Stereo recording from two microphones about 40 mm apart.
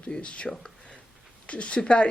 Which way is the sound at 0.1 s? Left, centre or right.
Left.